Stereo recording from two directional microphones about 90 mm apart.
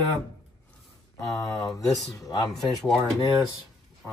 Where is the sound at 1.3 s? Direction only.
45° left (ahead or behind).